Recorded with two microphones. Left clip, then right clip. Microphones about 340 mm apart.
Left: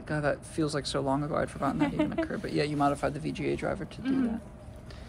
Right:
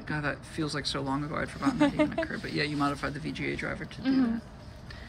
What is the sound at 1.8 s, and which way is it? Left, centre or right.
Speech, right.